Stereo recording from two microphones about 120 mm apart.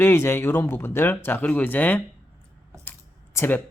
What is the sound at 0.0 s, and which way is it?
Speech, 20° left (ahead or behind).